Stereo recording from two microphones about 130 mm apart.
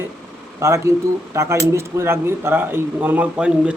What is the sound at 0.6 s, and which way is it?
Speech, 20° right (ahead or behind).